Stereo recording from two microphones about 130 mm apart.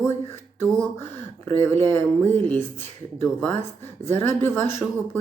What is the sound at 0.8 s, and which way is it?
A woman's voice, 20° left (ahead or behind).